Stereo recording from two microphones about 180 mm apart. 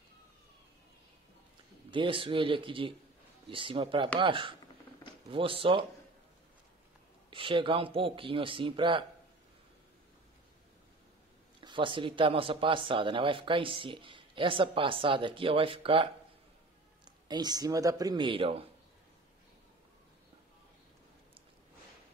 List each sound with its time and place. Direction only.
1.9 s speech: 30° right (ahead or behind)
7.2 s speech: 30° right (ahead or behind)
11.6 s speech: 25° right (ahead or behind)